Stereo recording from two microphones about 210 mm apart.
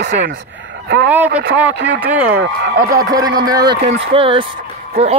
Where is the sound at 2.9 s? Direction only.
15° right (ahead or behind).